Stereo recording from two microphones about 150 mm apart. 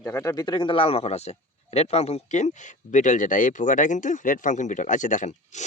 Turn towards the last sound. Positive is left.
turn(degrees=50)  # may be behind; listen again after turning